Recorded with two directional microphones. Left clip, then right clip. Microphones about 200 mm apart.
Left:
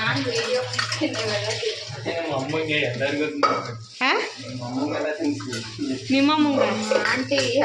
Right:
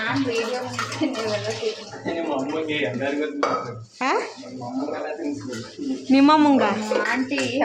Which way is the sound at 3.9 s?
15° right (ahead or behind).